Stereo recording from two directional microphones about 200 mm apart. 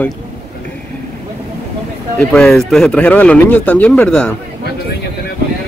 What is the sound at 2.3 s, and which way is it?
Speech, 5° left (ahead or behind).